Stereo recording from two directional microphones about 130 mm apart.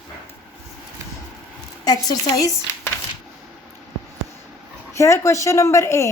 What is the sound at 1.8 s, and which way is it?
Speech, 30° left (ahead or behind).